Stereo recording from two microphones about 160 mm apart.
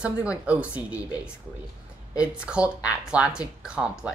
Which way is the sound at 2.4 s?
5° right (ahead or behind).